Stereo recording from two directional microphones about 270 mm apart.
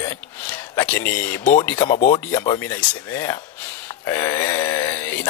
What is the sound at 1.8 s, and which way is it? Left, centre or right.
Speech, left.